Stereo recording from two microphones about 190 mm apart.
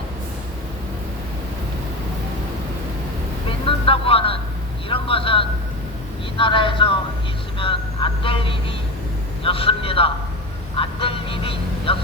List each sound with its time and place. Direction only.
3.7 s a man's voice: 30° left (ahead or behind)
7.6 s vehicle: 30° left (ahead or behind)
9.4 s speech: 30° left (ahead or behind)
10.8 s vehicle: 30° left (ahead or behind)